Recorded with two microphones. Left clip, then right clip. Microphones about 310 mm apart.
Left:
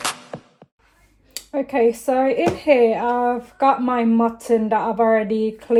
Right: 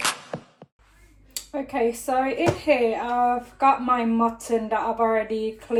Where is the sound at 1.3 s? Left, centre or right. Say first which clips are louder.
Left 6 dB; left.